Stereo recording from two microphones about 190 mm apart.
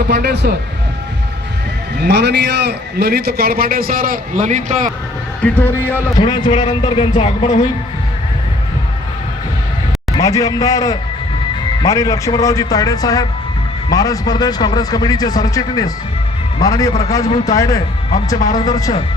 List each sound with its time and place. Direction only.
0.1 s a man's voice: 60° right (ahead or behind)
2.0 s a man's voice: 60° right (ahead or behind); by 4.9 s 40° right (ahead or behind)
5.4 s speech: 10° left (ahead or behind)
6.1 s a man's voice: 25° left (ahead or behind)
10.1 s a man's voice: 20° left (ahead or behind)
18.3 s speech: 40° left (ahead or behind)
18.6 s a man's voice: 20° left (ahead or behind)